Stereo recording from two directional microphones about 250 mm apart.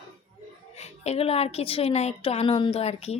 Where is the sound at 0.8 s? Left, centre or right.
Left.